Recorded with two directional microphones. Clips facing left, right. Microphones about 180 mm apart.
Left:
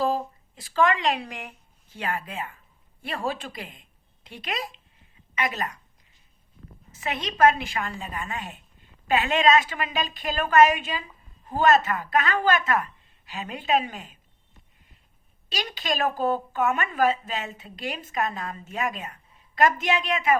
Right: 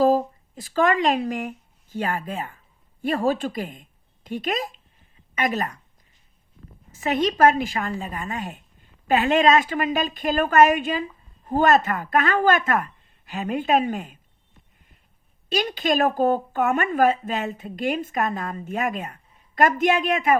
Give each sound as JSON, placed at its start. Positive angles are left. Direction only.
{"t": 0.0, "sound": "a woman's voice", "side_deg": -45}
{"t": 7.0, "sound": "speech", "side_deg": -40}
{"t": 15.7, "sound": "speech", "side_deg": -50}